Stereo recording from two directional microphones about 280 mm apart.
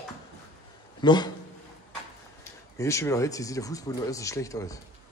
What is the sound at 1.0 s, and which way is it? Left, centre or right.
Speech, centre.